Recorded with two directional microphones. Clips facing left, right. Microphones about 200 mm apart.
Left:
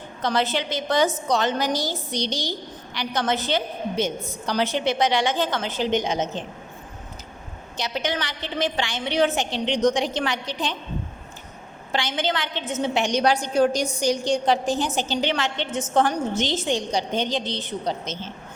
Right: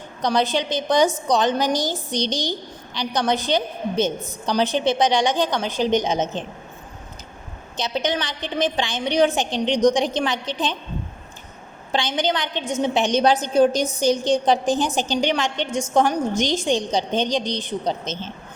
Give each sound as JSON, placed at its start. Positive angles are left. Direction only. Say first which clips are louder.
{"t": 0.2, "sound": "a woman's voice", "louder": "right 3 dB", "side_deg": -15}
{"t": 7.8, "sound": "a woman's voice", "louder": "right 3 dB", "side_deg": -20}
{"t": 11.9, "sound": "a woman's voice", "louder": "right 3 dB", "side_deg": -20}